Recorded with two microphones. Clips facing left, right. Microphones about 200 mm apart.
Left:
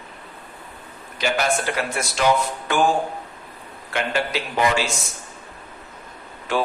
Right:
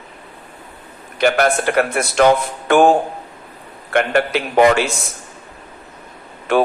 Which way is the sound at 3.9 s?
55° right (ahead or behind).